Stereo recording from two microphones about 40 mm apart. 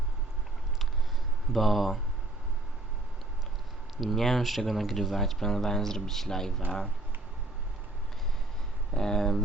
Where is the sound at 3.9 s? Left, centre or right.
Centre.